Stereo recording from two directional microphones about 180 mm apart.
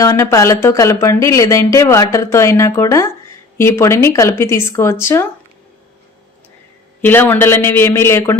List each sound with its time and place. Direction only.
0.0 s speech: 15° left (ahead or behind)
7.0 s speech: 10° left (ahead or behind)